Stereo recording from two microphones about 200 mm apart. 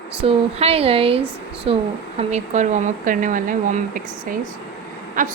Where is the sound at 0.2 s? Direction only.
30° right (ahead or behind).